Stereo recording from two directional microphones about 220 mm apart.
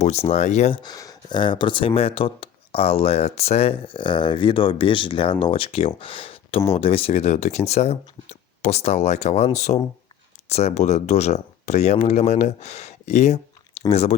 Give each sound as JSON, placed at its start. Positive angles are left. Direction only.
{"t": 0.0, "sound": "speech", "side_deg": 30}